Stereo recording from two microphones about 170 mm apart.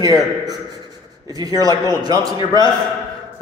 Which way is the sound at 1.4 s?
20° right (ahead or behind).